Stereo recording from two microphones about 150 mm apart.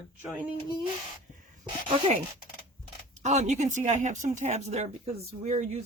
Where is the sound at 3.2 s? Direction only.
50° right (ahead or behind).